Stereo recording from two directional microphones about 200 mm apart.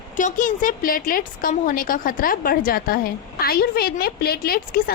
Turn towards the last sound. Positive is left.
turn(degrees=50)  # may be behind; listen again after turning